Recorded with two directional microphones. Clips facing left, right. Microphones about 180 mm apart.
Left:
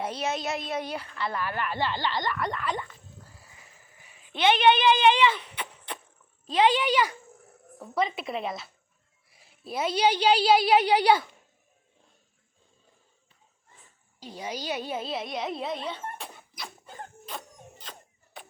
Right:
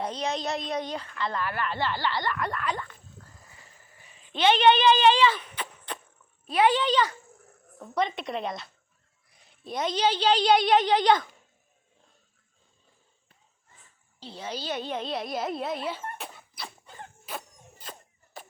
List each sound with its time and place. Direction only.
0.0 s a child's voice: 5° left (ahead or behind)
3.2 s a sound: 10° left (ahead or behind)
3.9 s speech: 10° left (ahead or behind)
6.5 s a woman's voice: 20° left (ahead or behind)
14.2 s a woman's voice: 10° left (ahead or behind)
17.2 s a sound: 5° right (ahead or behind)